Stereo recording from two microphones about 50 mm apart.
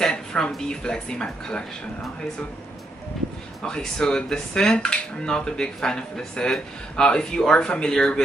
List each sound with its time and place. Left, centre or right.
0.0 s a sound: centre
0.7 s speech: centre
3.6 s speech: centre